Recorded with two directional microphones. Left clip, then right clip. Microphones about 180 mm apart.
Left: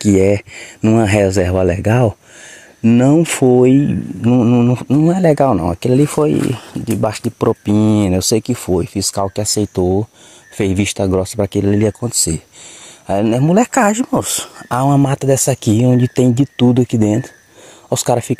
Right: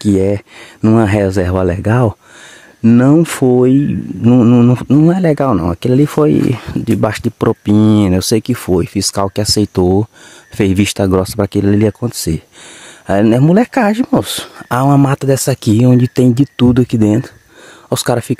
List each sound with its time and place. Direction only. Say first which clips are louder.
0.0 s speech: left 1 dB; 5° right (ahead or behind)
4.2 s speech: right 4 dB; 30° right (ahead or behind)
5.1 s speech: left 1 dB; 15° right (ahead or behind)
5.5 s speech: right 1 dB; 25° right (ahead or behind)
6.5 s speech: right 4 dB; 35° right (ahead or behind)
7.7 s speech: right 3 dB; 55° right (ahead or behind)
8.0 s speech: right 2 dB; 25° right (ahead or behind)